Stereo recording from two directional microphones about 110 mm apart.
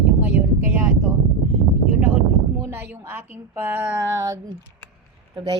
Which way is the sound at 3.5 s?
20° right (ahead or behind).